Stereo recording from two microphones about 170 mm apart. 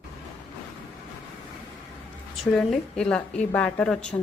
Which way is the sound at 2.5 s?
5° left (ahead or behind).